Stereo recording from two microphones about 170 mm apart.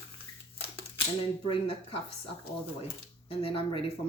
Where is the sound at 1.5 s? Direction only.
35° left (ahead or behind).